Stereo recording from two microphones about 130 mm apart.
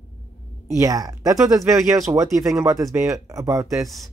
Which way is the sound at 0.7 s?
25° right (ahead or behind).